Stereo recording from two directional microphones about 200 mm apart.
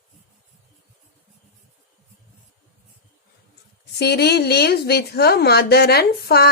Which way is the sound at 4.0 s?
55° left (ahead or behind).